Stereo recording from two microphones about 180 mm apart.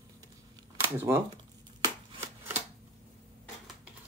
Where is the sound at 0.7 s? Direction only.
15° right (ahead or behind).